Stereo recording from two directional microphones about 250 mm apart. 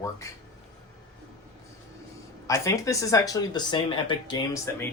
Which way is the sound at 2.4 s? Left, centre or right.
Centre.